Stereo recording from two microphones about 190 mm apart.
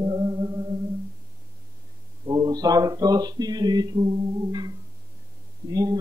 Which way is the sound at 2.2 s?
20° right (ahead or behind).